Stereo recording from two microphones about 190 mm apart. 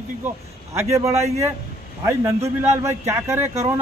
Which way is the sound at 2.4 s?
15° right (ahead or behind).